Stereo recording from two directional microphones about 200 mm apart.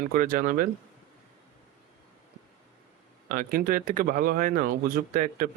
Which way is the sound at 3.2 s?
45° right (ahead or behind).